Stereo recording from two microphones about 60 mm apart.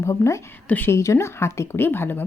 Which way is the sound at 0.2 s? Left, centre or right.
Left.